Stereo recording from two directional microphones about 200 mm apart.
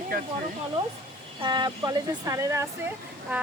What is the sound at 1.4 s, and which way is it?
Speech, 20° right (ahead or behind).